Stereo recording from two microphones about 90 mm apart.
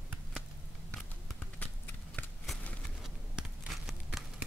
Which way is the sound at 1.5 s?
20° left (ahead or behind).